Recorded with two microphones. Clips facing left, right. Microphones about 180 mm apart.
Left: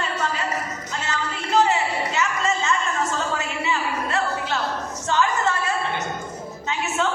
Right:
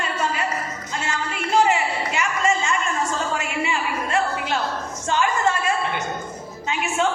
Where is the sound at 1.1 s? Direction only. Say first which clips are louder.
Right 1 dB; 15° right (ahead or behind).